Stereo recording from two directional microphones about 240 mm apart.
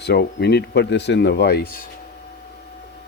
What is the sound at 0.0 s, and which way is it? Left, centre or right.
Speech, left.